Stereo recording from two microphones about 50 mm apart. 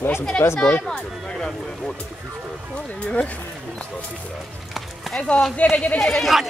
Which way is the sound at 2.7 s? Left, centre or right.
Left.